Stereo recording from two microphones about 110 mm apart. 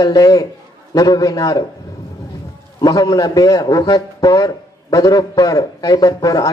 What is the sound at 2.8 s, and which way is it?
A man's voice, 35° left (ahead or behind).